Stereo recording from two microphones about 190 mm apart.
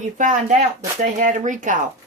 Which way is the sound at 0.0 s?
40° right (ahead or behind).